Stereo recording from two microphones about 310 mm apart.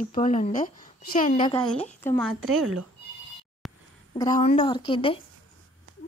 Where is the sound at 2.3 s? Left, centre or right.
Right.